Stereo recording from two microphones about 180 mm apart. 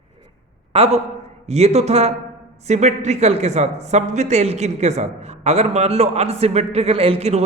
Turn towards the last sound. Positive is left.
turn(degrees=-35)  # may be behind; listen again after turning